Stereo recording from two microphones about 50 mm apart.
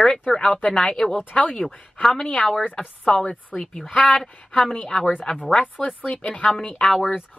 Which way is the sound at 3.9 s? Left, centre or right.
Centre.